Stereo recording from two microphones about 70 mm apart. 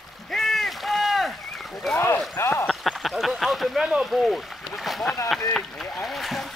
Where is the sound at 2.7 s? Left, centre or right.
Centre.